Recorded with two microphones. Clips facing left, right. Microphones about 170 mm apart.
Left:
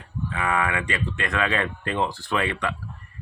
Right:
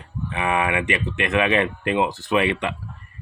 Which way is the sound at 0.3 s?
20° right (ahead or behind).